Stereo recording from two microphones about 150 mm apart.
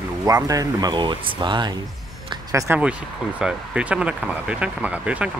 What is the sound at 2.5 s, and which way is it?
Speech, 10° right (ahead or behind).